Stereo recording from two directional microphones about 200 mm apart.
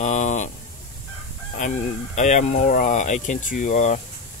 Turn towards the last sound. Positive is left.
turn(degrees=35)  # may be behind; listen again after turning